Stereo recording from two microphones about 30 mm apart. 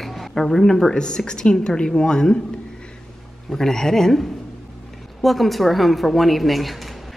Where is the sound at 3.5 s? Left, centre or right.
Centre.